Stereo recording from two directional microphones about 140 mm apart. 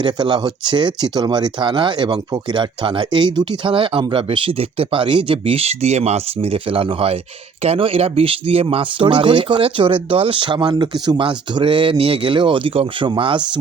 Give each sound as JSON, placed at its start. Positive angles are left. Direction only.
{"t": 0.0, "sound": "speech", "side_deg": -30}